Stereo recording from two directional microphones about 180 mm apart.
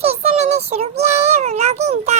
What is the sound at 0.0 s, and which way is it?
Child singing, 35° right (ahead or behind).